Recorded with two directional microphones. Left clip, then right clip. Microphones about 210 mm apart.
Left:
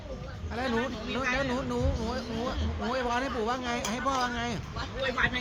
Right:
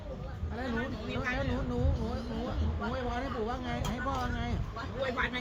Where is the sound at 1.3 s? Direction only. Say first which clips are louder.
Left 5 dB; 40° left (ahead or behind).